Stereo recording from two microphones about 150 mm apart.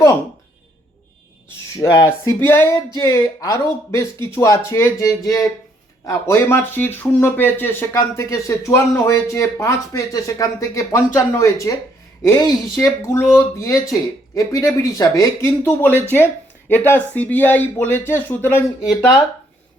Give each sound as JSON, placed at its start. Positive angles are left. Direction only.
{"t": 1.9, "sound": "speech", "side_deg": 20}